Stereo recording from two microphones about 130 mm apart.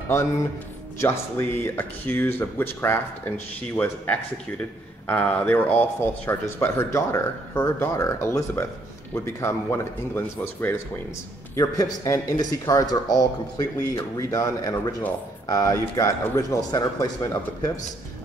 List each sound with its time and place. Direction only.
0.9 s speech: 20° left (ahead or behind)